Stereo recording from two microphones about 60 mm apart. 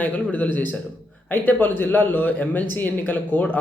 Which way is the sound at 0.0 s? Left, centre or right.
Left.